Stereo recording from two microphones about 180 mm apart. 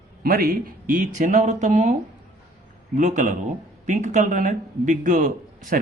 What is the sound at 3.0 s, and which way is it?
A man's voice, 45° right (ahead or behind).